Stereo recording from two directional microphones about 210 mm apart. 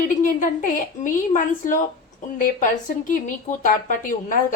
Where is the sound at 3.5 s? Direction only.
40° left (ahead or behind).